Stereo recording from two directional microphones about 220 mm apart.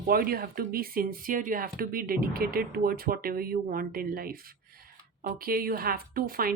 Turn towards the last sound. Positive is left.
turn(degrees=-40)  # may be behind; listen again after turning